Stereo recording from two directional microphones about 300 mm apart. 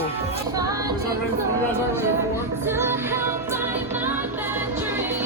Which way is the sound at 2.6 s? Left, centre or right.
Centre.